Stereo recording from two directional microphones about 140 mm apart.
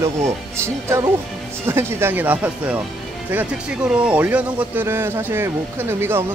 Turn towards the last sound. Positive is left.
turn(degrees=-15)  # may be behind; listen again after turning